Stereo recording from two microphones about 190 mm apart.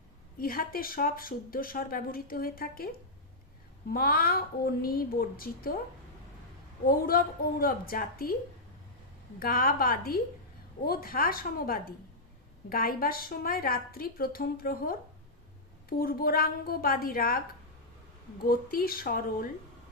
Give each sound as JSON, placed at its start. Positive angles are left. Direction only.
{"t": 0.3, "sound": "speech", "side_deg": 50}
{"t": 3.9, "sound": "speech", "side_deg": 50}
{"t": 6.8, "sound": "speech", "side_deg": 50}
{"t": 9.4, "sound": "speech", "side_deg": 50}
{"t": 18.4, "sound": "speech", "side_deg": 50}